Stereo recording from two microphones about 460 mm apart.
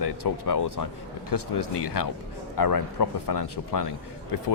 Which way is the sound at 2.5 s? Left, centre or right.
Left.